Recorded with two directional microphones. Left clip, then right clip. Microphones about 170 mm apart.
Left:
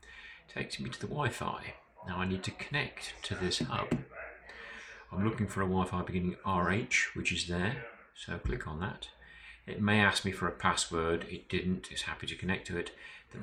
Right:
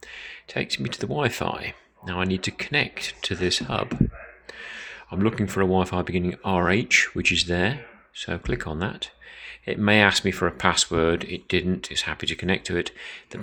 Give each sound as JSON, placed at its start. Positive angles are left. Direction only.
{"t": 0.2, "sound": "speech", "side_deg": -55}